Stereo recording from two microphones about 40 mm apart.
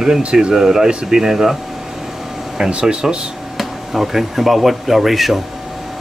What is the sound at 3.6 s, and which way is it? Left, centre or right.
Speech, centre.